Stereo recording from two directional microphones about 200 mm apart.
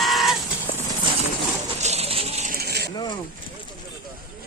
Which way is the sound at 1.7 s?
35° right (ahead or behind).